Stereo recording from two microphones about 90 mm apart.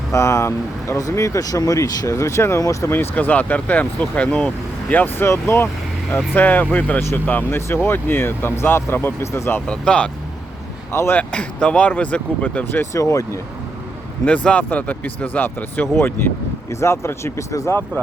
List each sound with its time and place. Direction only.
0.1 s speech: 35° left (ahead or behind)
6.3 s speech: 20° left (ahead or behind)
9.6 s speech: 10° left (ahead or behind)
10.9 s speech: 30° left (ahead or behind)
11.2 s speech: 10° left (ahead or behind)
12.9 s speech: 35° left (ahead or behind)
14.3 s speech: 15° left (ahead or behind); by 17.7 s 35° left (ahead or behind)